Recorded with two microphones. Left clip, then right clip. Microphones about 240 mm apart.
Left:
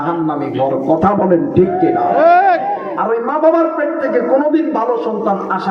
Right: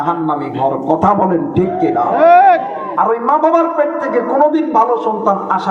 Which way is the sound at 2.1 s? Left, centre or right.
Right.